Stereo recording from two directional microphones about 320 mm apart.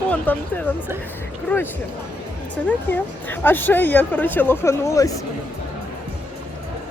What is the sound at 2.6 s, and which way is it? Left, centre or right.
Speech, centre.